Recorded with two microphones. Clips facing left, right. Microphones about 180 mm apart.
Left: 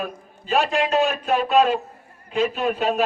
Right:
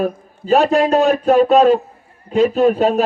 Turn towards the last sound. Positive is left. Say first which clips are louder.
# right 8 dB
turn(degrees=-40)  # may be behind; listen again after turning